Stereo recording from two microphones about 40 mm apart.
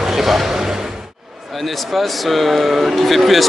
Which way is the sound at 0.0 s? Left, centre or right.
Centre.